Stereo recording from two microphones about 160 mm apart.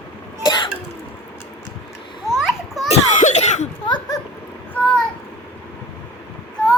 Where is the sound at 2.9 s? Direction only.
50° left (ahead or behind).